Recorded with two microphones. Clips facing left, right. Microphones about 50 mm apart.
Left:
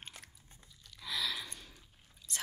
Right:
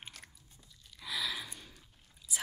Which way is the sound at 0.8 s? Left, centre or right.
Centre.